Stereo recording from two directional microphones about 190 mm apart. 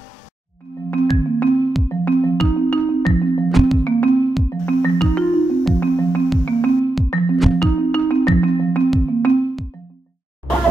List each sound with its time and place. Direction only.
0.8 s music: 5° left (ahead or behind)
1.9 s music: 10° left (ahead or behind)
2.3 s music: centre (ahead or behind)